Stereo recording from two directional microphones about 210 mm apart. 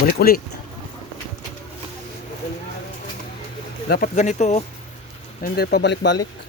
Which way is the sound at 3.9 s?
40° left (ahead or behind).